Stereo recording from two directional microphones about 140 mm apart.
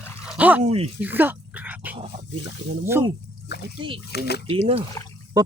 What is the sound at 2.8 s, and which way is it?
Speech, 15° right (ahead or behind).